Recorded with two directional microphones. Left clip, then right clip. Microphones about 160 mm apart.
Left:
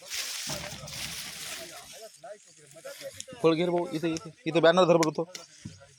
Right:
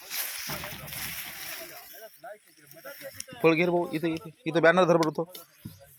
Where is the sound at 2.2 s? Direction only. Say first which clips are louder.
Right 1 dB; 50° left (ahead or behind).